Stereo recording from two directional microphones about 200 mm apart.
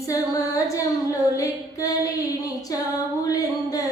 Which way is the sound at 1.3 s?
15° left (ahead or behind).